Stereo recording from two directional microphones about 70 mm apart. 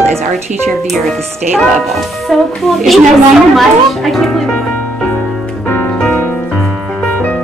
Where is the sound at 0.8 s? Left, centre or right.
Centre.